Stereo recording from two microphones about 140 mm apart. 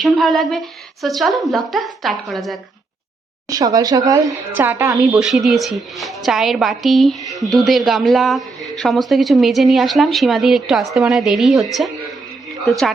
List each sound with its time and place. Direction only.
0.0 s a woman's voice: centre (ahead or behind)
3.5 s a woman's voice: 25° right (ahead or behind)
4.5 s a woman's voice: 15° right (ahead or behind)
5.2 s a woman's voice: centre (ahead or behind)